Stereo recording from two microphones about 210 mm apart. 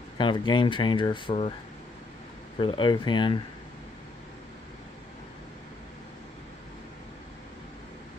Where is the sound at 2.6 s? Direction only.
20° left (ahead or behind).